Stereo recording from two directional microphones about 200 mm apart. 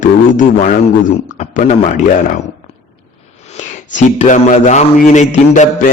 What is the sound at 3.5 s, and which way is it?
Speech, 35° left (ahead or behind).